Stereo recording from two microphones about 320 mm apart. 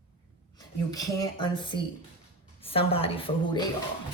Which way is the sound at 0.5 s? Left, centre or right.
Centre.